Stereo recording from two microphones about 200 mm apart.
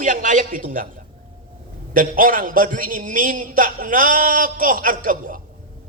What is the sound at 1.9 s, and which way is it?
A man's voice, 45° right (ahead or behind).